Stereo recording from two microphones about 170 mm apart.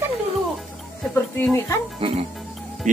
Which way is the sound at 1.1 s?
15° left (ahead or behind).